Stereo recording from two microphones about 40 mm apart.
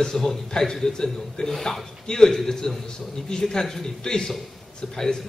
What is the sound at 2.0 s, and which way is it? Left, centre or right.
A man's voice, centre.